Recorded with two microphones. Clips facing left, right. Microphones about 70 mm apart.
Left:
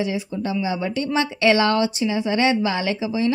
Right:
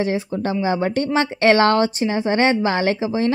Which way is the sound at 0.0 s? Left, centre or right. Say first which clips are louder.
Right 3 dB; right.